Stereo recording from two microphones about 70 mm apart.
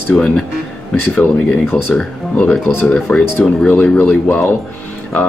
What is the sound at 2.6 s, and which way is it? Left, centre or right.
Speech, left.